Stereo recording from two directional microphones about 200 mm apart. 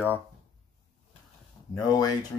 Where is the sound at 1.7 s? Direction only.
20° left (ahead or behind).